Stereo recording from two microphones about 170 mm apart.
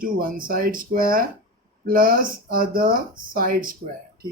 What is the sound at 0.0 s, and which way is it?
Speech, 55° right (ahead or behind).